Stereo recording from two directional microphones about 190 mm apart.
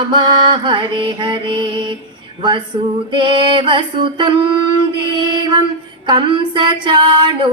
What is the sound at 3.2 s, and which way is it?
Mantra, 25° right (ahead or behind).